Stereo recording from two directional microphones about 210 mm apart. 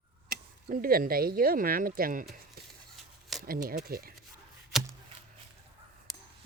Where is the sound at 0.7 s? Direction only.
45° right (ahead or behind).